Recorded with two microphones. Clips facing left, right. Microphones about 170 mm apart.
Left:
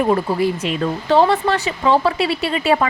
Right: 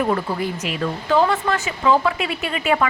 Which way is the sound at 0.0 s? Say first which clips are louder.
Left 5 dB; 25° left (ahead or behind).